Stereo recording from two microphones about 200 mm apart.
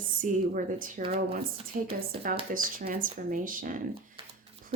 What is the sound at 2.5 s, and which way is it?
Speech, 50° right (ahead or behind).